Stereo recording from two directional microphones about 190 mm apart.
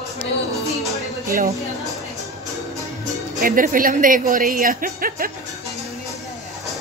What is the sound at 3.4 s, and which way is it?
A woman's voice, 45° right (ahead or behind).